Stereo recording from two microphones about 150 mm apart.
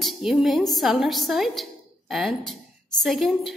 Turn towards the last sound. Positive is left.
turn(degrees=0)  # may be behind; listen again after turning